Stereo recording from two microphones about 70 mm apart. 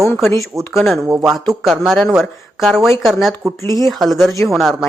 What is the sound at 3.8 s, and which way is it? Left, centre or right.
Speech, centre.